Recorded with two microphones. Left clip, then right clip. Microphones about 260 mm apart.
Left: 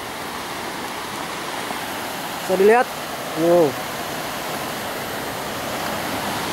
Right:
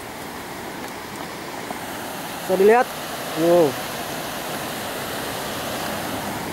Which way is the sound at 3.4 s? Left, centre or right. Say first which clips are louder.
Even; left.